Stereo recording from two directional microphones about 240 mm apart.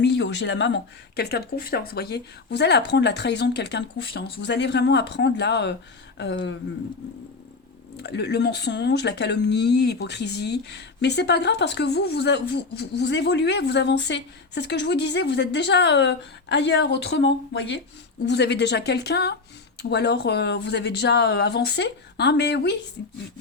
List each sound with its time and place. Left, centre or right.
0.0 s speech: left
7.9 s speech: left